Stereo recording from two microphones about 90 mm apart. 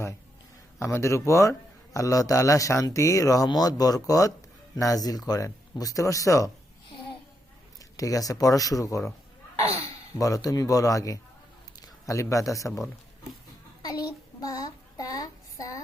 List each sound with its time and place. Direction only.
0.8 s a man's voice: 30° left (ahead or behind)
7.9 s a man's voice: 40° left (ahead or behind)
10.2 s a man's voice: 40° left (ahead or behind)
13.8 s child singing: 45° left (ahead or behind)